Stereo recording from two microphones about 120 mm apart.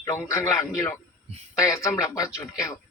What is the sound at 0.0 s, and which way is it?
Speech, 25° left (ahead or behind).